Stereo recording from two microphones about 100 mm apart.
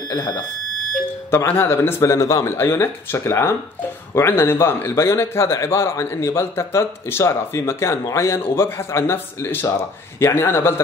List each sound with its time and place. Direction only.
0.1 s speech: 35° left (ahead or behind)
1.3 s a man's voice: 25° left (ahead or behind)